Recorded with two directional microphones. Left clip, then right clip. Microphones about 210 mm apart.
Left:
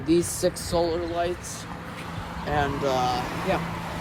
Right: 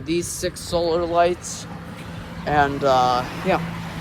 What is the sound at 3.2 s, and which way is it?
Speech, 45° left (ahead or behind).